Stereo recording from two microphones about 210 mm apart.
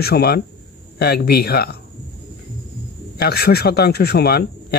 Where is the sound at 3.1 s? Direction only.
50° left (ahead or behind).